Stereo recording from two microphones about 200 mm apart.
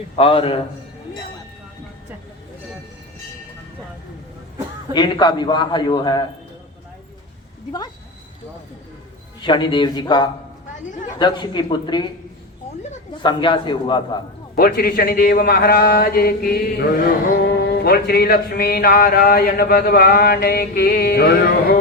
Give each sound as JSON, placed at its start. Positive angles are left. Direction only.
{"t": 0.2, "sound": "a man's voice", "side_deg": 30}
{"t": 4.9, "sound": "a man's voice", "side_deg": 20}
{"t": 9.4, "sound": "a man's voice", "side_deg": 25}
{"t": 13.2, "sound": "a man's voice", "side_deg": 25}
{"t": 14.5, "sound": "a man's voice", "side_deg": 50}